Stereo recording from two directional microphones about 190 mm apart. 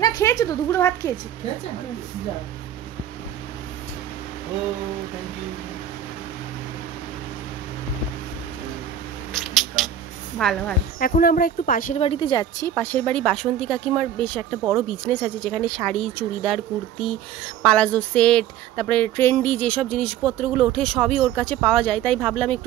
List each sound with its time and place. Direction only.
0.0 s a woman's voice: 20° left (ahead or behind)
9.3 s cat: centre (ahead or behind)
10.3 s speech: 5° left (ahead or behind)
11.0 s speech: 50° left (ahead or behind)
12.0 s a woman's voice: 25° left (ahead or behind); by 22.6 s 5° left (ahead or behind)